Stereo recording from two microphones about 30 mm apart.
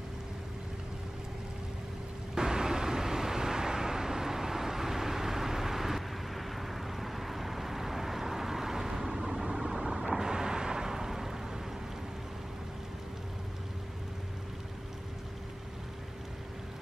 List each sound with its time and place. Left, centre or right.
2.3 s vehicle: right
10.1 s thunder: right